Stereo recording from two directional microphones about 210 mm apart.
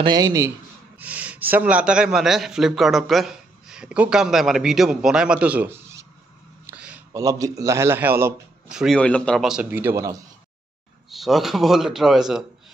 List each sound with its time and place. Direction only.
0.0 s a man's voice: 20° right (ahead or behind)
6.7 s a sound: 5° right (ahead or behind)
7.1 s a man's voice: 15° right (ahead or behind)
11.1 s speech: centre (ahead or behind)